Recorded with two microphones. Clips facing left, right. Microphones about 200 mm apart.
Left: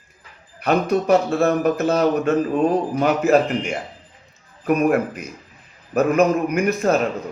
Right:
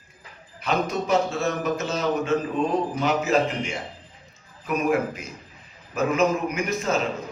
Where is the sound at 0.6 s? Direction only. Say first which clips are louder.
Left 6 dB; 60° left (ahead or behind).